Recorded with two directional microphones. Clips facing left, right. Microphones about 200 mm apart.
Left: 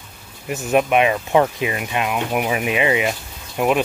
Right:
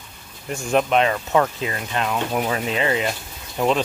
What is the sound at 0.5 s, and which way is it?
Speech, 10° left (ahead or behind).